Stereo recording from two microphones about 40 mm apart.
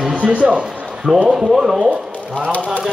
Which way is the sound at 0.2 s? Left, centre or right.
Right.